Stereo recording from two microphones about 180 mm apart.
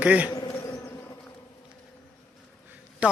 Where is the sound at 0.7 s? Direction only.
15° left (ahead or behind).